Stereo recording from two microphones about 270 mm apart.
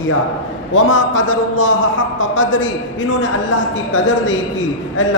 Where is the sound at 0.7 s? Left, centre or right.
Left.